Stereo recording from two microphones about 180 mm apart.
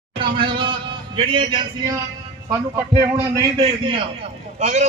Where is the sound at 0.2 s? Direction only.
30° right (ahead or behind).